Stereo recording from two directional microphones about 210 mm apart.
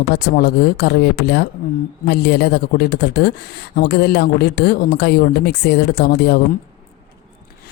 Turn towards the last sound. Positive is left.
turn(degrees=50)  # may be behind; listen again after turning